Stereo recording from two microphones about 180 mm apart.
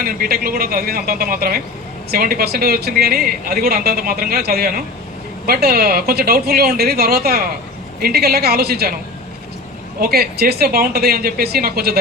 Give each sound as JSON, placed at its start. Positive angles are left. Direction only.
{"t": 0.0, "sound": "a man's voice", "side_deg": -55}
{"t": 10.0, "sound": "a man's voice", "side_deg": -60}